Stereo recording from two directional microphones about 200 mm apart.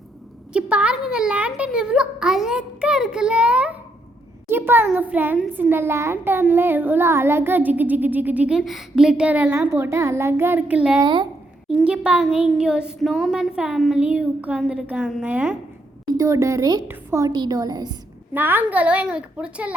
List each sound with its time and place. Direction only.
0.5 s a child's voice: 5° right (ahead or behind)
11.0 s a woman's voice: 20° right (ahead or behind)
11.7 s a child's voice: 5° right (ahead or behind)
18.3 s a child's voice: 10° right (ahead or behind)